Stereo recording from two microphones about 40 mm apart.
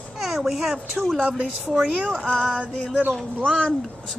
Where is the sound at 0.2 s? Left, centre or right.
Centre.